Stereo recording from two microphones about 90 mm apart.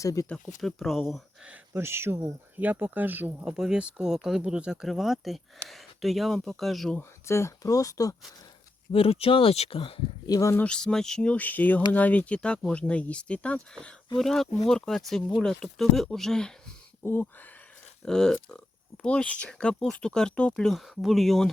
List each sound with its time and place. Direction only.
0.0 s speech: 35° left (ahead or behind)
0.4 s speech: centre (ahead or behind)
1.5 s speech: 25° right (ahead or behind)
3.4 s speech: 5° right (ahead or behind)
7.3 s speech: 30° left (ahead or behind)
8.9 s speech: 90° left
10.2 s speech: 45° left (ahead or behind)
10.6 s speech: 10° left (ahead or behind)
17.0 s speech: 20° left (ahead or behind)
18.0 s speech: 5° left (ahead or behind)